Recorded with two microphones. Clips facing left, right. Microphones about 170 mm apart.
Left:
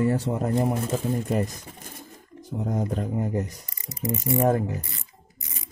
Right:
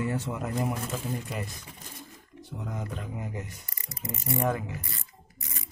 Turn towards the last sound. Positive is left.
turn(degrees=40)  # may be behind; listen again after turning